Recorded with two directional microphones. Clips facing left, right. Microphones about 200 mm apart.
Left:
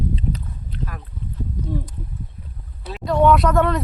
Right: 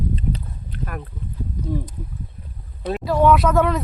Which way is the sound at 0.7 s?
60° right (ahead or behind).